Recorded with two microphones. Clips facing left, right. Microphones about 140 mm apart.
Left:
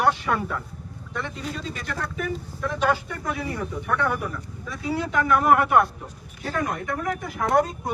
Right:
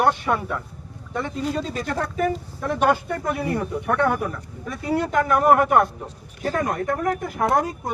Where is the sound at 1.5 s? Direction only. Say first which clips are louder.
Right 6 dB; 45° right (ahead or behind).